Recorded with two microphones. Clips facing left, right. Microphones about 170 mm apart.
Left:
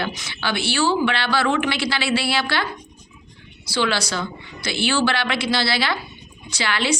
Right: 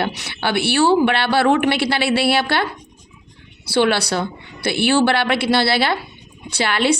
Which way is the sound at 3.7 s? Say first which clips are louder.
Right 6 dB; 60° right (ahead or behind).